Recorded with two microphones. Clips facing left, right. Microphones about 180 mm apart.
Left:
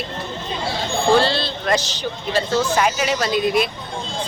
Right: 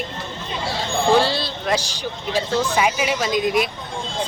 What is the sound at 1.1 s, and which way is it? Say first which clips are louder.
A woman's voice: left 1 dB; 10° right (ahead or behind).